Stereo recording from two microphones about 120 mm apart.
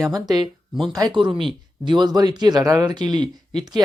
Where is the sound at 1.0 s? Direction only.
40° right (ahead or behind).